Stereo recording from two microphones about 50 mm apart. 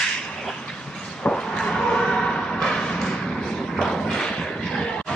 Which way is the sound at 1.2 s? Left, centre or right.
Centre.